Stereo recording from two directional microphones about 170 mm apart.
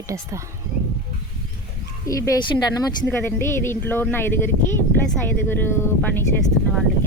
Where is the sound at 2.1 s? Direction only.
20° left (ahead or behind).